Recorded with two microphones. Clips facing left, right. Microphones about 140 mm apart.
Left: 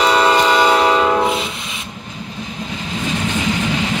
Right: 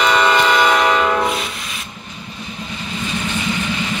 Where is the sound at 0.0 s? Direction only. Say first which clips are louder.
Left 1 dB; 35° left (ahead or behind).